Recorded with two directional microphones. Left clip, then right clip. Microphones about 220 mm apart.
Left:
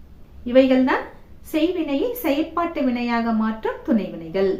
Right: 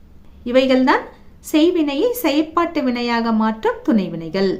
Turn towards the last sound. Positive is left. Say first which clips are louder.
# right 2 dB
turn(degrees=-50)  # may be behind; listen again after turning